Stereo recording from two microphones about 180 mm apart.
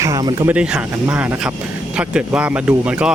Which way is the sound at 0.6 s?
5° right (ahead or behind).